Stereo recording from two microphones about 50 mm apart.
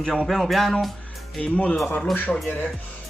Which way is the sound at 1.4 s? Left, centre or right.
Left.